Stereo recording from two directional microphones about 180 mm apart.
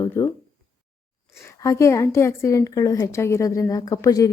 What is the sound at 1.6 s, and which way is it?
Speech, 15° left (ahead or behind).